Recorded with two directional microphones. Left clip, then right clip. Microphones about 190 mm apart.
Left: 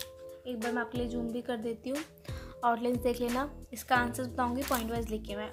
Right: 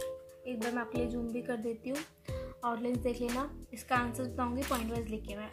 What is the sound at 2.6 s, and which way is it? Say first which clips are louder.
A woman's voice: left 6 dB; 25° left (ahead or behind).